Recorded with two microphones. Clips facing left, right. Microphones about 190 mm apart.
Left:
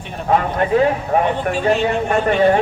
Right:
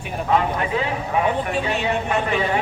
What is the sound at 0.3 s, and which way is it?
Speech, 45° left (ahead or behind).